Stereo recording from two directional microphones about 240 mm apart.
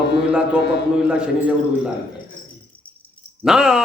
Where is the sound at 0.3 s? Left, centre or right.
Centre.